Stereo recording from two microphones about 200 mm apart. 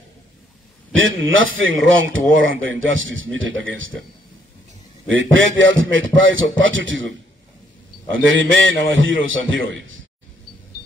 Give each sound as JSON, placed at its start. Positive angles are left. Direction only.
{"t": 0.9, "sound": "a man's voice", "side_deg": -75}
{"t": 5.1, "sound": "a man's voice", "side_deg": -75}